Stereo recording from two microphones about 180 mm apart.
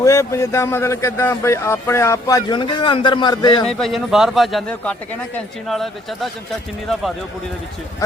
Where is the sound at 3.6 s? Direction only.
5° left (ahead or behind).